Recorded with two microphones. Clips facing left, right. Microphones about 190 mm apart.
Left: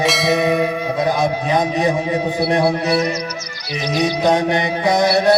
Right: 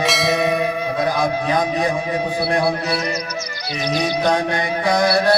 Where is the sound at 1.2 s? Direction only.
20° left (ahead or behind).